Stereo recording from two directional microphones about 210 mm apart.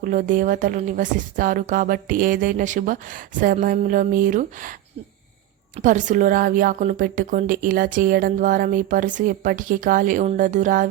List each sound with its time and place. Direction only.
0.0 s a woman's voice: 40° right (ahead or behind)
5.7 s a woman's voice: 35° right (ahead or behind)